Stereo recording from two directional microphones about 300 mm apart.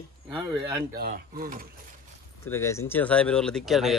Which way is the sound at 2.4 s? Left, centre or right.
Centre.